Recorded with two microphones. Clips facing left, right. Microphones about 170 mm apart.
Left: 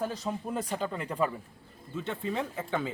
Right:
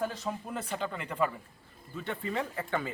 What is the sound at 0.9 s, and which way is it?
Speech, 35° left (ahead or behind).